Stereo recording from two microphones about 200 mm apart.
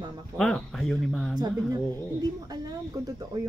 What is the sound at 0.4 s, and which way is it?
A man's voice, 5° left (ahead or behind).